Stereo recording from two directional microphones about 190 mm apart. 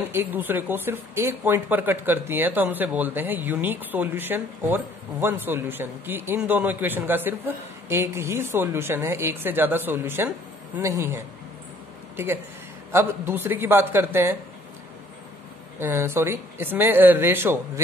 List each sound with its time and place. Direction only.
0.1 s speech: 10° right (ahead or behind)
12.9 s speech: 10° right (ahead or behind)
15.8 s speech: 10° right (ahead or behind)